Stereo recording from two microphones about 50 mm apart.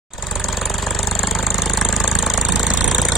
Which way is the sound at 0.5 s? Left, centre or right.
Centre.